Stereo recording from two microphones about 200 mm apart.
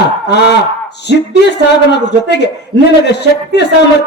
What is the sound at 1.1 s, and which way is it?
Speech, 60° left (ahead or behind).